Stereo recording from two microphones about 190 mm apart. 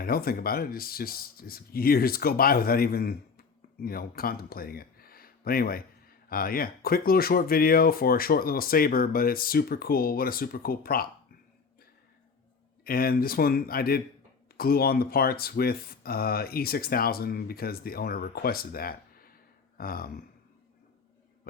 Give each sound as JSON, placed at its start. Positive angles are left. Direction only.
{"t": 0.0, "sound": "speech", "side_deg": 50}
{"t": 12.8, "sound": "speech", "side_deg": 50}